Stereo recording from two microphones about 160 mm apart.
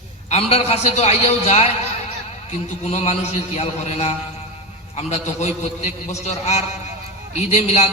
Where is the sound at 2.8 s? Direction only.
40° left (ahead or behind).